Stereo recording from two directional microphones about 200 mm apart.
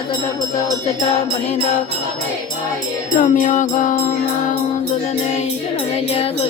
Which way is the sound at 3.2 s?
40° left (ahead or behind).